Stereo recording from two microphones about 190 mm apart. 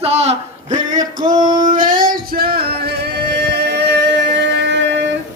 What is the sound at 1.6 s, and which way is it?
Music, 45° right (ahead or behind).